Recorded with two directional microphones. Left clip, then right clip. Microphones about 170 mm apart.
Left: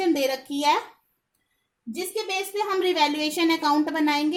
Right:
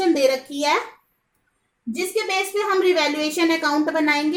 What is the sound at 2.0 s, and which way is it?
A woman's voice, 55° left (ahead or behind).